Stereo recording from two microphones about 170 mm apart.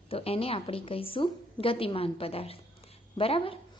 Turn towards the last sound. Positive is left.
turn(degrees=35)  # may be behind; listen again after turning